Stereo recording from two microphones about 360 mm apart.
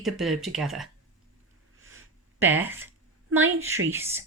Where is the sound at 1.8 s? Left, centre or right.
Right.